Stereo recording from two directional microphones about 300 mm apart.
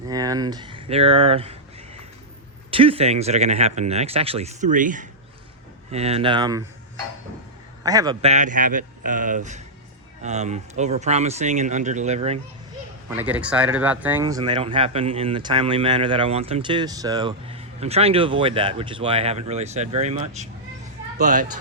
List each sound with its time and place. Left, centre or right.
0.1 s speech: centre
2.6 s speech: centre
7.9 s speech: centre
13.1 s speech: centre; by 21.4 s right